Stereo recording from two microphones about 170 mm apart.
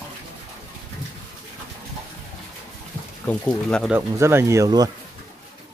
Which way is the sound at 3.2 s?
5° left (ahead or behind).